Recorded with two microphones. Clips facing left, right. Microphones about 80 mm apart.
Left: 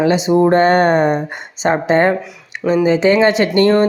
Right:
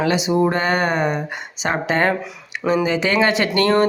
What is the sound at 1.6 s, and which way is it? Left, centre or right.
Speech, left.